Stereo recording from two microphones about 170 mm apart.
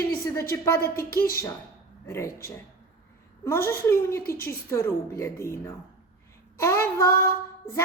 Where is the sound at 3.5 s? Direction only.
15° left (ahead or behind).